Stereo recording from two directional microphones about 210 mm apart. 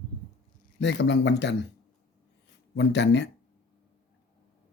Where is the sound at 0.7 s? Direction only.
55° left (ahead or behind).